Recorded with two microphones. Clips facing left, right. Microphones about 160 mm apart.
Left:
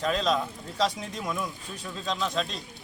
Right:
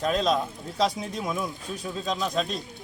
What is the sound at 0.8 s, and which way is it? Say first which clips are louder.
Speech: right 2 dB; 10° right (ahead or behind).